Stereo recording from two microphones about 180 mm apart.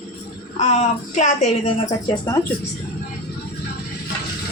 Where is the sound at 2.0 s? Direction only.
20° left (ahead or behind).